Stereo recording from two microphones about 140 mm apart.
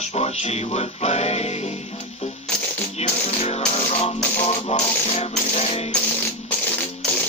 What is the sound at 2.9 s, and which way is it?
Music, 50° left (ahead or behind).